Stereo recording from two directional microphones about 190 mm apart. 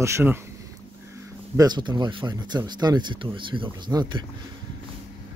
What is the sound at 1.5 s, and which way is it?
Speech, 20° right (ahead or behind).